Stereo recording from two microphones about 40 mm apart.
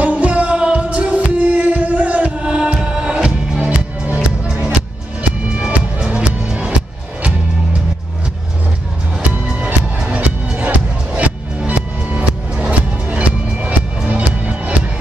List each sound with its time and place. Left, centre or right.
0.0 s music: right
2.4 s music: right
3.5 s music: right
9.9 s music: right